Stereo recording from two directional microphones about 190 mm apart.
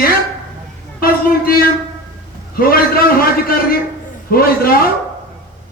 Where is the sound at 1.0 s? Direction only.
50° left (ahead or behind).